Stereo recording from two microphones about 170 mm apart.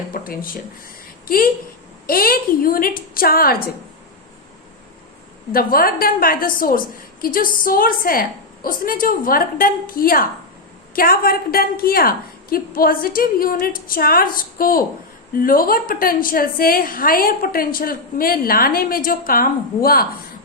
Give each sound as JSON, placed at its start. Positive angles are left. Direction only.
{"t": 0.1, "sound": "a woman's voice", "side_deg": 55}
{"t": 2.0, "sound": "a woman's voice", "side_deg": 60}
{"t": 5.5, "sound": "a woman's voice", "side_deg": 60}